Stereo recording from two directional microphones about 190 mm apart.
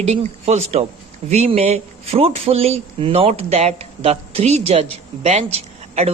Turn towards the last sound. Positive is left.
turn(degrees=-35)  # may be behind; listen again after turning